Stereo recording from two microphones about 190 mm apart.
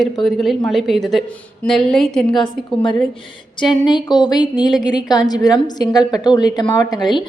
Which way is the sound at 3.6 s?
25° left (ahead or behind).